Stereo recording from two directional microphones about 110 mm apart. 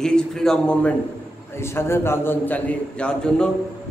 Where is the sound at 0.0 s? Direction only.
5° left (ahead or behind).